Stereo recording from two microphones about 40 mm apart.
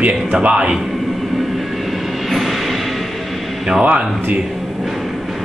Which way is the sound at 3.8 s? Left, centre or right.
Right.